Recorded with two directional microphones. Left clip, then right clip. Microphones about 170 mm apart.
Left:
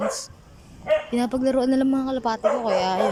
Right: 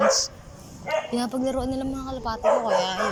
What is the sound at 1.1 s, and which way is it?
Speech, 25° left (ahead or behind).